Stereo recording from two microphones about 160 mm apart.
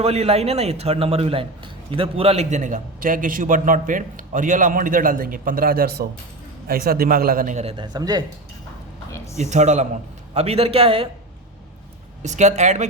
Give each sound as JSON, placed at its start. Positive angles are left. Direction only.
{"t": 0.0, "sound": "a man's voice", "side_deg": -40}
{"t": 7.9, "sound": "speech", "side_deg": -25}
{"t": 9.1, "sound": "a sound", "side_deg": 20}
{"t": 9.4, "sound": "speech", "side_deg": -45}
{"t": 12.2, "sound": "speech", "side_deg": -50}